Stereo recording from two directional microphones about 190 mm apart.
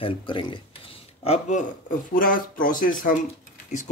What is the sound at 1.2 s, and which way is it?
Speech, 35° left (ahead or behind).